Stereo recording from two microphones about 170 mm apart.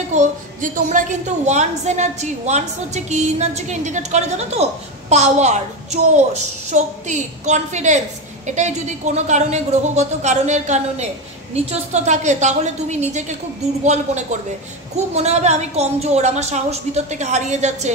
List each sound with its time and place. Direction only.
0.1 s a woman's voice: 50° right (ahead or behind)